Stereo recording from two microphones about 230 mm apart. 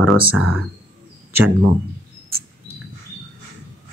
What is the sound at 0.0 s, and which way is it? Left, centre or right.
Speech, centre.